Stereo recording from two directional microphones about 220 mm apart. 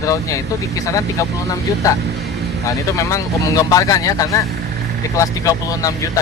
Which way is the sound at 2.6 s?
15° left (ahead or behind).